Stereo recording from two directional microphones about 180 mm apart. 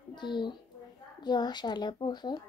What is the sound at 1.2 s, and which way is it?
A woman's voice, 25° left (ahead or behind).